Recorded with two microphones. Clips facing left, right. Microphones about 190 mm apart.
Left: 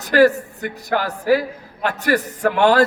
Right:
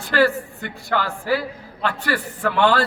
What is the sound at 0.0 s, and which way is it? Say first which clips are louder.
A woman's voice: left 5 dB; 45° left (ahead or behind).